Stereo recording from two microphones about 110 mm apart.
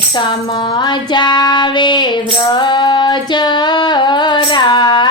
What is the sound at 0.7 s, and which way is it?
Child singing, 45° left (ahead or behind).